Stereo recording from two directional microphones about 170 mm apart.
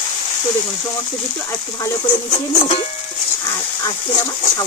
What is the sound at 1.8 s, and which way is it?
Speech, 30° left (ahead or behind).